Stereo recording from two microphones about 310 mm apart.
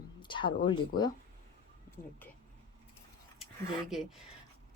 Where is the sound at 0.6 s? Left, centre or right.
Centre.